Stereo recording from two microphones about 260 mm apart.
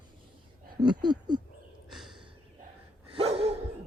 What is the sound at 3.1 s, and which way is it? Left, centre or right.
Dog, right.